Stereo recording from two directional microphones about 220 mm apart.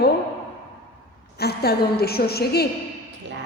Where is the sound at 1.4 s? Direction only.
45° left (ahead or behind).